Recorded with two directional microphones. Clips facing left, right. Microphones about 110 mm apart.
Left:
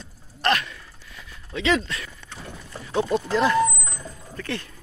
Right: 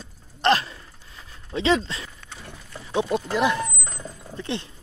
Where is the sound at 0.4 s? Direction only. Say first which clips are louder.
Right 3 dB; 30° right (ahead or behind).